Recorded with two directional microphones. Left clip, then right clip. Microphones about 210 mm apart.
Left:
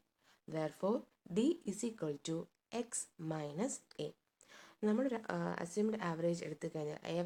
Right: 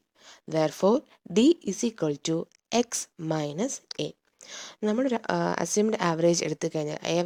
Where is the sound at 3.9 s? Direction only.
40° right (ahead or behind).